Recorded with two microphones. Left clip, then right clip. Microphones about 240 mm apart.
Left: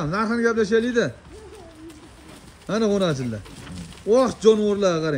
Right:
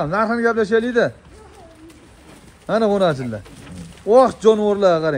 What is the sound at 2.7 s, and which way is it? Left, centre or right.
Speech, centre.